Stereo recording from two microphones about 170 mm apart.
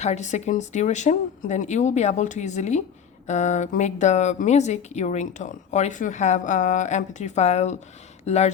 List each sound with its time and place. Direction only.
0.0 s speech: 40° left (ahead or behind)